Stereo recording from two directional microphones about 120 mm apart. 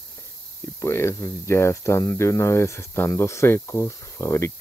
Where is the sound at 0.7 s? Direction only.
20° left (ahead or behind).